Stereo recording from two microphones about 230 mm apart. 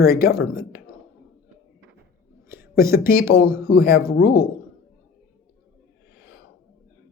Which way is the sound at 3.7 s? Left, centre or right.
Left.